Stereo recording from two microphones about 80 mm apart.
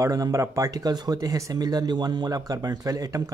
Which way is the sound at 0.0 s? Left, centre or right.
Right.